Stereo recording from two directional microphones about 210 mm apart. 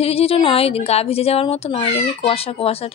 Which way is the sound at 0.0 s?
30° left (ahead or behind).